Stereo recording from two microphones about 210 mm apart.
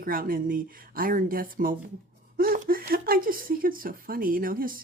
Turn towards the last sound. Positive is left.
turn(degrees=-45)  # may be behind; listen again after turning